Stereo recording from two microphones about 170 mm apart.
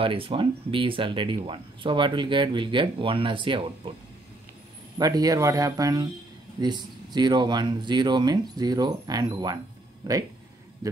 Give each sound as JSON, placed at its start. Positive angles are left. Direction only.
{"t": 0.0, "sound": "speech", "side_deg": -30}
{"t": 4.9, "sound": "speech", "side_deg": -20}